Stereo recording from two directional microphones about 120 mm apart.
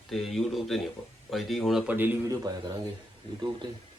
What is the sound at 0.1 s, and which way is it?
Speech, centre (ahead or behind).